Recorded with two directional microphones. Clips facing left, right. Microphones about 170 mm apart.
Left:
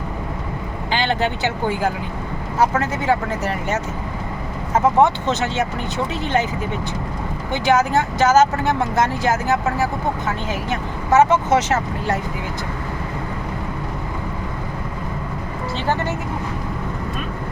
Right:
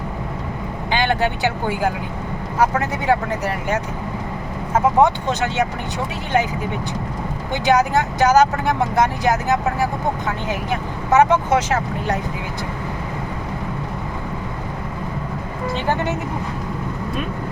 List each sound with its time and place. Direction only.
0.9 s speech: 15° right (ahead or behind)
7.5 s speech: 15° right (ahead or behind)